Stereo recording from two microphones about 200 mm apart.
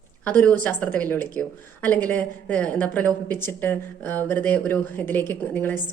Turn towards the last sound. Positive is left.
turn(degrees=10)  # may be behind; listen again after turning